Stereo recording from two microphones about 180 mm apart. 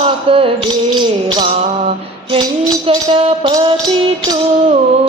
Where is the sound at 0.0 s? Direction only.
30° right (ahead or behind).